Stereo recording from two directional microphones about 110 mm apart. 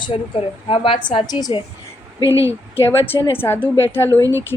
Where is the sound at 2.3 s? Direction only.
25° right (ahead or behind).